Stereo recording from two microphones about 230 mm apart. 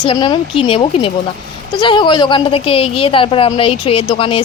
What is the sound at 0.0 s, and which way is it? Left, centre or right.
A woman's voice, centre.